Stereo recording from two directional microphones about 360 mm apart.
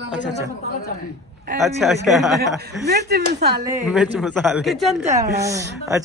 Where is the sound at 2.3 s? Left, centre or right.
Right.